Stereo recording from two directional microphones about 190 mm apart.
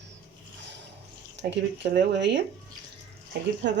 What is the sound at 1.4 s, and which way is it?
Speech, 65° right (ahead or behind).